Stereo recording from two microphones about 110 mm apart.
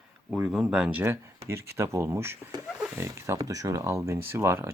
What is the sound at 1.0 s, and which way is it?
Speech, 25° right (ahead or behind).